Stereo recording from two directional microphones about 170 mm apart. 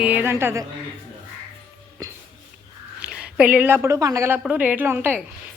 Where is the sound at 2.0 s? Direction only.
20° right (ahead or behind).